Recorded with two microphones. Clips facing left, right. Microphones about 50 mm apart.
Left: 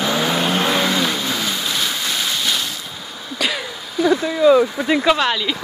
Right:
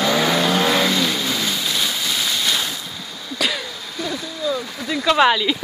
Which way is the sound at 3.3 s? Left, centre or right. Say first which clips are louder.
Left 1 dB; centre.